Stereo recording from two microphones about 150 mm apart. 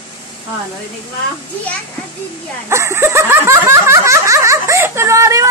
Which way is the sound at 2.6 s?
15° right (ahead or behind).